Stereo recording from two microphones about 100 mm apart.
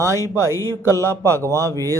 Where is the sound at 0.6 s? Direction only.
35° left (ahead or behind).